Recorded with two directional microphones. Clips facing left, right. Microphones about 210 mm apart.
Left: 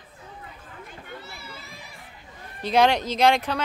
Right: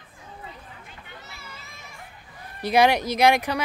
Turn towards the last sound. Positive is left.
turn(degrees=-10)  # may be behind; listen again after turning